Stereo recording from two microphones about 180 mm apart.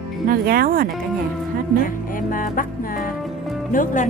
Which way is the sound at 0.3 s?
55° right (ahead or behind).